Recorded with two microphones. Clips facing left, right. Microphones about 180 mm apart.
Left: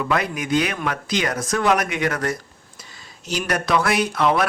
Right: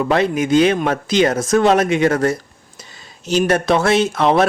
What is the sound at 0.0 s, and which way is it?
Speech, 30° right (ahead or behind).